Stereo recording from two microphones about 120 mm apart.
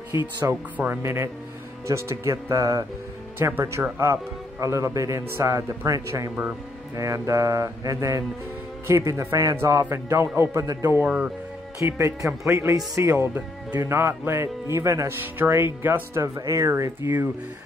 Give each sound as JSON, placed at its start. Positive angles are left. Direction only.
{"t": 0.4, "sound": "speech", "side_deg": -15}
{"t": 11.0, "sound": "a man's voice", "side_deg": -10}
{"t": 11.8, "sound": "speech", "side_deg": -25}